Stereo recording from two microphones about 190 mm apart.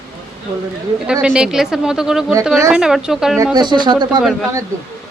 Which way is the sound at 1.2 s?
5° right (ahead or behind).